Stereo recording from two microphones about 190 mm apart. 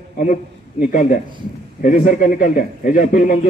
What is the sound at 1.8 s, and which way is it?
A man's voice, 45° left (ahead or behind).